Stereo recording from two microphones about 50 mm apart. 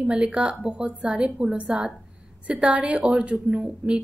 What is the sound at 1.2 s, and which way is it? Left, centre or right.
A woman's voice, centre.